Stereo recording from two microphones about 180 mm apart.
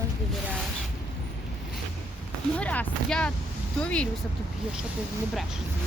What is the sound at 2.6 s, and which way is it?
Speech, 5° left (ahead or behind).